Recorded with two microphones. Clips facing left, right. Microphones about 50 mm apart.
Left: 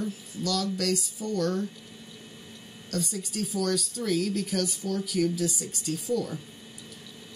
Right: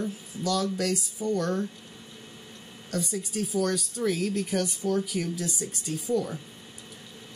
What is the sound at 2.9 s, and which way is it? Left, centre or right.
Speech, centre.